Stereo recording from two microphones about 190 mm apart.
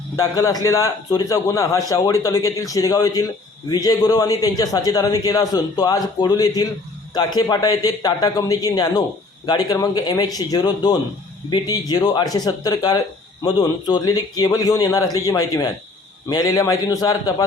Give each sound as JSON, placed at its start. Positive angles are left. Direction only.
{"t": 0.2, "sound": "a man's voice", "side_deg": 20}